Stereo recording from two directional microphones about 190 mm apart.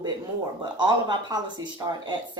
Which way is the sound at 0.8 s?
25° right (ahead or behind).